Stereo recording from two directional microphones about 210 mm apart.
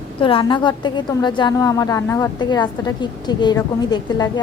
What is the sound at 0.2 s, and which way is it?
A woman's voice, 25° left (ahead or behind).